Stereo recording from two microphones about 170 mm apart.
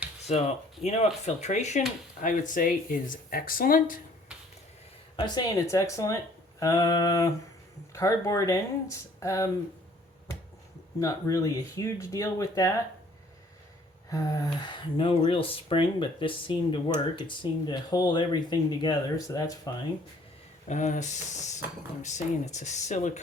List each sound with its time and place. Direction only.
0.2 s speech: 40° left (ahead or behind); by 4.0 s 55° left (ahead or behind)
5.1 s speech: 25° left (ahead or behind)
11.0 s speech: 20° left (ahead or behind)
14.1 s speech: 20° left (ahead or behind)
20.7 s speech: 45° left (ahead or behind)